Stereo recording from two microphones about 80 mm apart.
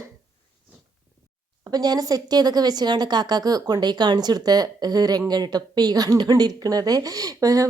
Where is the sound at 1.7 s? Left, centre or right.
Right.